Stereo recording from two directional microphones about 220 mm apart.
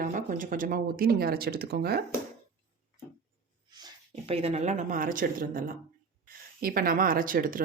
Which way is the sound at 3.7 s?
20° right (ahead or behind).